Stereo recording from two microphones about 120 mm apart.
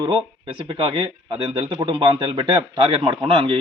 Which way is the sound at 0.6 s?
45° right (ahead or behind).